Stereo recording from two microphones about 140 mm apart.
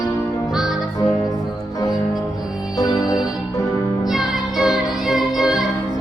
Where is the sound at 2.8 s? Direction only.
25° left (ahead or behind).